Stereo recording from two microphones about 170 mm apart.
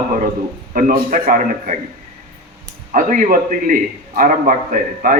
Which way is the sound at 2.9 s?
55° right (ahead or behind).